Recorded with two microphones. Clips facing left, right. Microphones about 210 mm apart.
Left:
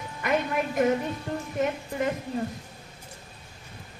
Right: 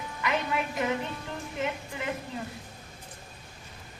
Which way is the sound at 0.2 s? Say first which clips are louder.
Left 4 dB; 50° left (ahead or behind).